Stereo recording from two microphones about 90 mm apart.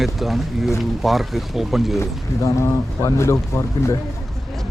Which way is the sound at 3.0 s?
30° left (ahead or behind).